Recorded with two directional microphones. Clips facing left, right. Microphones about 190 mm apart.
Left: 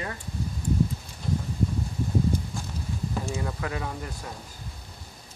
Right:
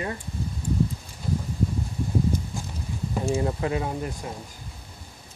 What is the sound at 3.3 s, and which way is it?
Speech, 25° right (ahead or behind).